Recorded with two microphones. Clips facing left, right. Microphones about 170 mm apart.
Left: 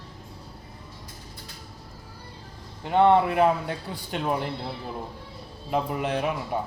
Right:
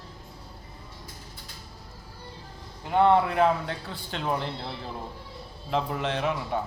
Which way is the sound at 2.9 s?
20° left (ahead or behind).